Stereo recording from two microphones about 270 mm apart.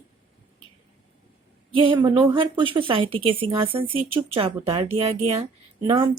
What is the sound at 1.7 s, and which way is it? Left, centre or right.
A woman's voice, centre.